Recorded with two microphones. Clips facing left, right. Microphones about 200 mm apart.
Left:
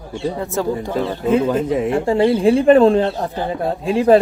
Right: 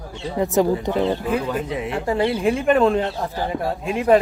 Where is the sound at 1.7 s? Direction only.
45° left (ahead or behind).